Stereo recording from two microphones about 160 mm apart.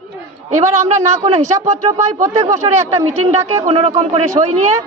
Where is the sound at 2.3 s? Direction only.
20° right (ahead or behind).